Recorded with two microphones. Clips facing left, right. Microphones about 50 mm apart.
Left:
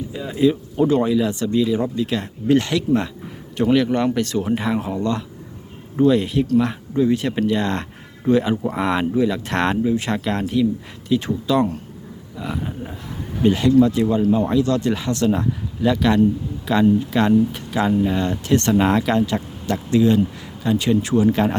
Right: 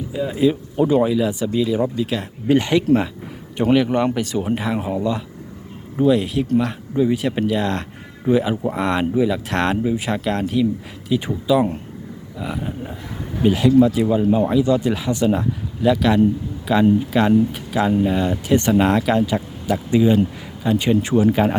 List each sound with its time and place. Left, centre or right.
0.1 s speech: centre
14.2 s speech: centre
14.4 s speech: centre
21.2 s speech: centre